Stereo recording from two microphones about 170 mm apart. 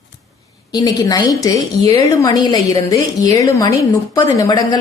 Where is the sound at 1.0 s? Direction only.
20° left (ahead or behind).